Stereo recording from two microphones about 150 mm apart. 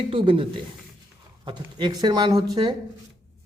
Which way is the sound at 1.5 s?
30° right (ahead or behind).